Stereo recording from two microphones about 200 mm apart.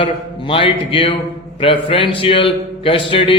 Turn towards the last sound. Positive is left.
turn(degrees=25)  # may be behind; listen again after turning